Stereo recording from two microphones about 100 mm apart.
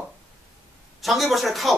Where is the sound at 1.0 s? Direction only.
Centre (ahead or behind).